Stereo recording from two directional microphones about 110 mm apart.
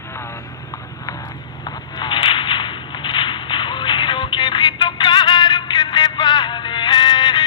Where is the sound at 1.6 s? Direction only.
45° left (ahead or behind).